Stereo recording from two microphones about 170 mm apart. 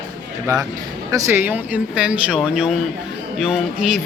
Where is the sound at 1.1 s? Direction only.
15° right (ahead or behind).